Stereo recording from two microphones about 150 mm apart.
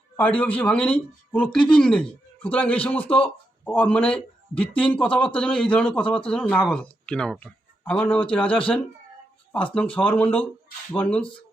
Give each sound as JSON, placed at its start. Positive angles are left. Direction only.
{"t": 0.2, "sound": "speech", "side_deg": 10}